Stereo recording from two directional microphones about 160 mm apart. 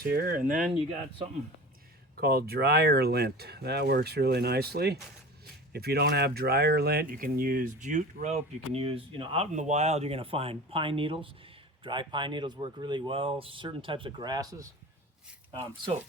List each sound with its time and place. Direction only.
0.0 s speech: 65° right (ahead or behind)
2.1 s speech: 80° right; by 14.4 s 25° right (ahead or behind)